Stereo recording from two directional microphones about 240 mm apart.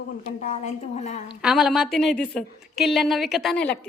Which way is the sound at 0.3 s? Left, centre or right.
Left.